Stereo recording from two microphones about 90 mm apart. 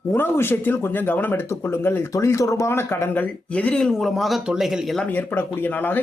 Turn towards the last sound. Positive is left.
turn(degrees=20)  # may be behind; listen again after turning